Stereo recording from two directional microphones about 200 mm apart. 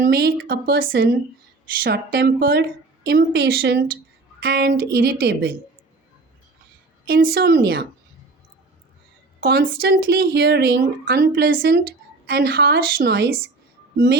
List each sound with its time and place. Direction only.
0.0 s speech: 55° right (ahead or behind)
7.1 s speech: 45° right (ahead or behind)
9.4 s speech: 50° right (ahead or behind)